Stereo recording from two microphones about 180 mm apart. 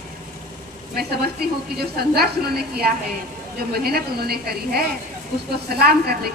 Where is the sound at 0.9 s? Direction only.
60° right (ahead or behind).